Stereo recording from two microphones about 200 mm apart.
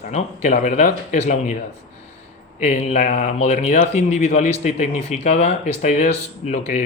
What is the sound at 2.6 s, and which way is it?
A man's voice, 35° left (ahead or behind).